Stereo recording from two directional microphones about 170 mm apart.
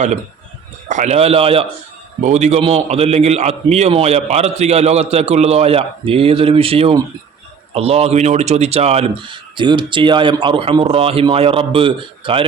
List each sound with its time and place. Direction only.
0.9 s a man's voice: 45° right (ahead or behind)